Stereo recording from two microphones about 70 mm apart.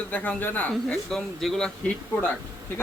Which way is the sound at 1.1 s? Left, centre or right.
Centre.